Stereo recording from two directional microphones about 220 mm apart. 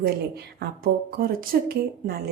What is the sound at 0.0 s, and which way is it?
Speech, 45° right (ahead or behind).